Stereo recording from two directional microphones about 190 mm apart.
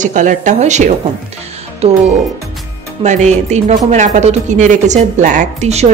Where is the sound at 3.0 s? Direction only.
40° right (ahead or behind).